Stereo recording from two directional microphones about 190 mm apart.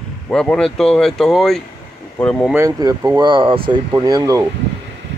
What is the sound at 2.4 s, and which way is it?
Speech, 15° right (ahead or behind).